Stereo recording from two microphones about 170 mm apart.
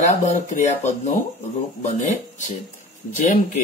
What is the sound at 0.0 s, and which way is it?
Speech, 45° left (ahead or behind).